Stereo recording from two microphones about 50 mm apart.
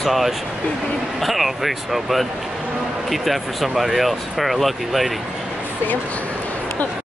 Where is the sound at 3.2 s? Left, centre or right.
Centre.